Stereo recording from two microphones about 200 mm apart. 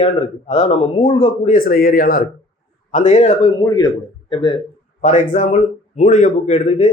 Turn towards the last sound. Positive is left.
turn(degrees=35)  # may be behind; listen again after turning